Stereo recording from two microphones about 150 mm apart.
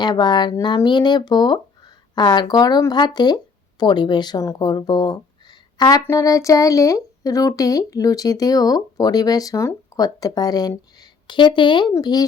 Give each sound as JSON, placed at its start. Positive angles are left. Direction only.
{"t": 0.0, "sound": "speech", "side_deg": 30}